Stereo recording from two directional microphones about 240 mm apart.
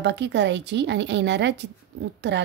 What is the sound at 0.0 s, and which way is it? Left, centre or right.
A woman's voice, right.